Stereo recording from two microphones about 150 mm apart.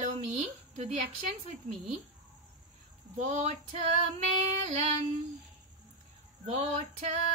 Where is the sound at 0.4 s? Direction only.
45° right (ahead or behind).